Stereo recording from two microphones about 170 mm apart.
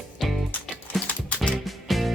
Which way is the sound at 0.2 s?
Centre (ahead or behind).